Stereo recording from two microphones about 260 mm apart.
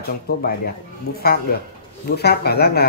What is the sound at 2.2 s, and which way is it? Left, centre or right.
Speech, left.